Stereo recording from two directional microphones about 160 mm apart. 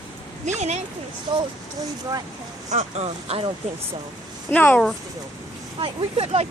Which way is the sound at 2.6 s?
45° right (ahead or behind).